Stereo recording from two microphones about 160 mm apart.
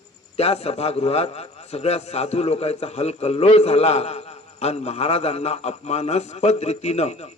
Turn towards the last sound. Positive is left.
turn(degrees=45)  # may be behind; listen again after turning